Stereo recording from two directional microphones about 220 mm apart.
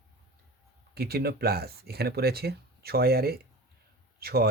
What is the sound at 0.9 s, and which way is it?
A man's voice, 45° right (ahead or behind).